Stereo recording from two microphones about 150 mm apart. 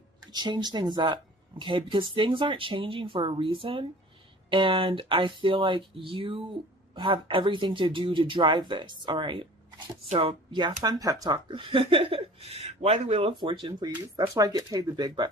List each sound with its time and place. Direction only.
0.3 s speech: 30° right (ahead or behind)